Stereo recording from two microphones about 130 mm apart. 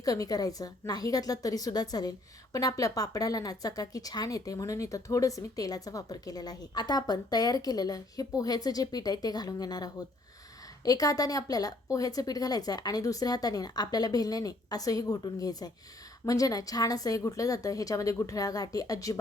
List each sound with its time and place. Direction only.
0.0 s a woman's voice: 25° left (ahead or behind)